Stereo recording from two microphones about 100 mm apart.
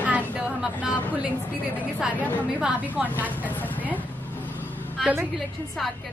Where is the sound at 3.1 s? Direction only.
15° left (ahead or behind).